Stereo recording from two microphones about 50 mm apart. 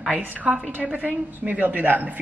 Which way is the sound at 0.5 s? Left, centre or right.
Right.